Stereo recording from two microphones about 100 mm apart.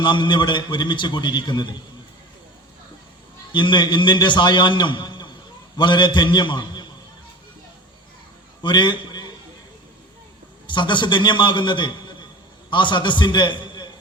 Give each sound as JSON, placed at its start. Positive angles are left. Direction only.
{"t": 0.0, "sound": "a man's voice", "side_deg": 50}
{"t": 3.5, "sound": "a man's voice", "side_deg": 50}
{"t": 8.6, "sound": "a man's voice", "side_deg": 50}
{"t": 10.7, "sound": "a man's voice", "side_deg": 50}